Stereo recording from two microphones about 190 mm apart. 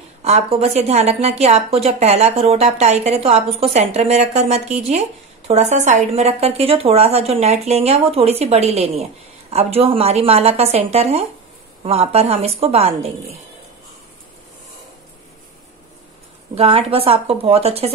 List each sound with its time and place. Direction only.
0.2 s speech: 30° right (ahead or behind)
16.5 s speech: 30° right (ahead or behind)